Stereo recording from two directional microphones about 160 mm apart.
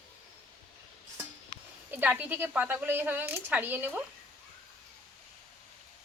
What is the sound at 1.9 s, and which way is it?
Speech, 10° right (ahead or behind).